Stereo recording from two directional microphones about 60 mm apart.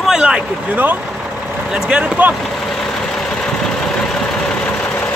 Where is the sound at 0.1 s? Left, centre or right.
Centre.